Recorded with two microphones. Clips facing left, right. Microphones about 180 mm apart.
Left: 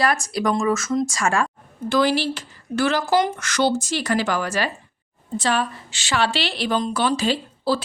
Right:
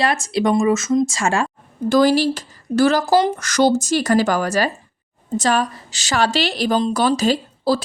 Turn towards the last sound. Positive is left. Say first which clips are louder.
# right 4 dB
turn(degrees=-40)  # may be behind; listen again after turning